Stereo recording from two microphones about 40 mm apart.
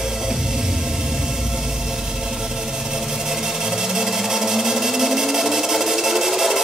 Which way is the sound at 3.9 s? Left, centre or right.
Centre.